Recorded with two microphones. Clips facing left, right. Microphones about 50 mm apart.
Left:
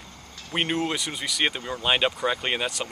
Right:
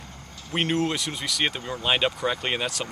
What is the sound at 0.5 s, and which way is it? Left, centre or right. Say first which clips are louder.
Speech: right 1 dB; centre.